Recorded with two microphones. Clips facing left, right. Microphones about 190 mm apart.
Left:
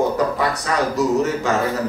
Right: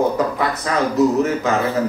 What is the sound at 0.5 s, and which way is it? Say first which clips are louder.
Speech: right 2 dB; 80° left.